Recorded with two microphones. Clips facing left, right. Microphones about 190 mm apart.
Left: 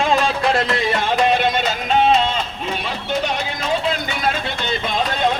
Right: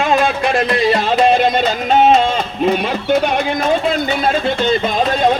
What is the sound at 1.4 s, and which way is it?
Music, 45° right (ahead or behind).